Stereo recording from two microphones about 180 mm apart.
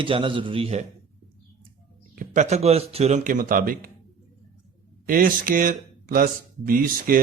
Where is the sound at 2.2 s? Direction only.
45° right (ahead or behind).